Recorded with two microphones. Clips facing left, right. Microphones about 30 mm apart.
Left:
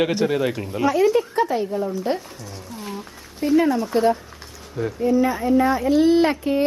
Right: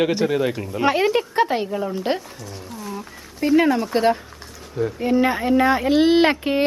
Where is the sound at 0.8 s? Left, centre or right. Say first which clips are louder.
Left 1 dB; right.